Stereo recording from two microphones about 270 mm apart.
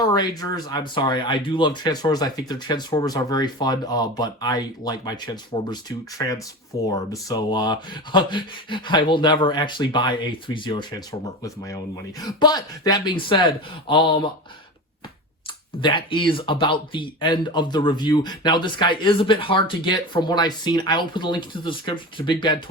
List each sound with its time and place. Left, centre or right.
0.0 s speech: centre
15.8 s speech: centre